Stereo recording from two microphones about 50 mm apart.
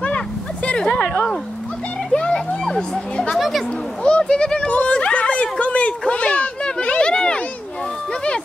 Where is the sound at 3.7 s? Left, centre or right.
Centre.